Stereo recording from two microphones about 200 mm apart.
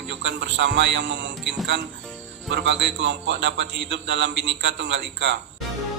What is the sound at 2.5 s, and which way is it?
A man's voice, 65° right (ahead or behind).